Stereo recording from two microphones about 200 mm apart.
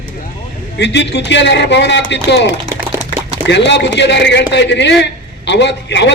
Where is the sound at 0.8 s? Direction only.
60° left (ahead or behind).